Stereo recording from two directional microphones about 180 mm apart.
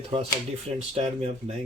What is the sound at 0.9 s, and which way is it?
Speech, 35° right (ahead or behind).